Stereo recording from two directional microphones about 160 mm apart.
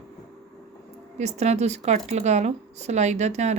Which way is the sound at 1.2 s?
45° right (ahead or behind).